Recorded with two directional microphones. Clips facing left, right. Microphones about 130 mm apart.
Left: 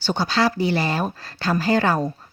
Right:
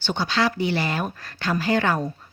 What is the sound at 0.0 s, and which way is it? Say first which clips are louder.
Speech: left 2 dB; 40° left (ahead or behind).